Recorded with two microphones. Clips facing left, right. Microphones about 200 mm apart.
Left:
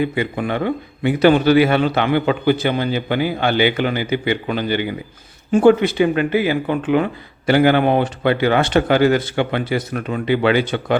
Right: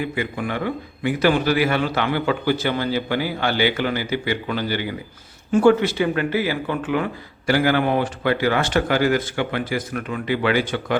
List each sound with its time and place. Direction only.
0.0 s a man's voice: 25° left (ahead or behind)